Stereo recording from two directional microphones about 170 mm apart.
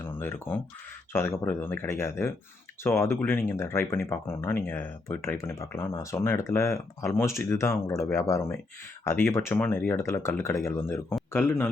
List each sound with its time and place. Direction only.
0.0 s speech: 15° left (ahead or behind)